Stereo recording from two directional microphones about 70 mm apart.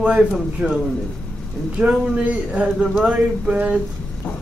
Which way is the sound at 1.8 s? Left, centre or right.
Centre.